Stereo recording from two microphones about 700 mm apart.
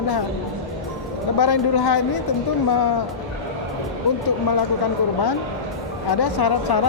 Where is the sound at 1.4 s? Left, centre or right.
Left.